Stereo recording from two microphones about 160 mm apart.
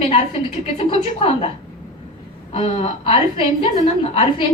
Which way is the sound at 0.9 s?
35° left (ahead or behind).